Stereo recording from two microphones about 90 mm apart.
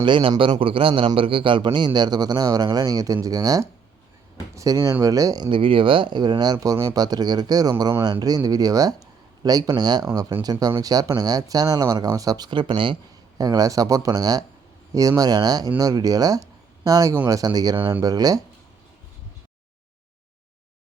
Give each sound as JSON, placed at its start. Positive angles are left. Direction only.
{"t": 0.0, "sound": "a man's voice", "side_deg": -70}
{"t": 5.5, "sound": "speech", "side_deg": -75}
{"t": 12.5, "sound": "a man's voice", "side_deg": -60}
{"t": 13.4, "sound": "speech", "side_deg": -45}